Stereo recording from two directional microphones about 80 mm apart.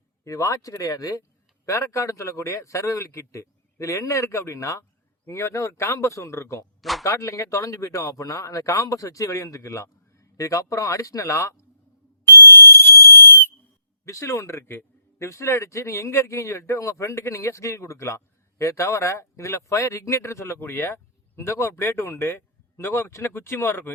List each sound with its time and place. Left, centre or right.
0.3 s a man's voice: left
12.3 s whistle: left
14.0 s a man's voice: left